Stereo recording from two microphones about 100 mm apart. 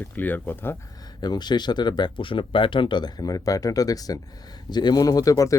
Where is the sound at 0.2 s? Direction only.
20° left (ahead or behind).